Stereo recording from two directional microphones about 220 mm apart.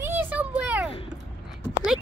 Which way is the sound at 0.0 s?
10° right (ahead or behind).